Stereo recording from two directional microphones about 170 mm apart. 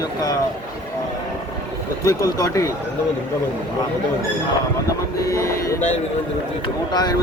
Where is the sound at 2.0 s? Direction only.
20° left (ahead or behind).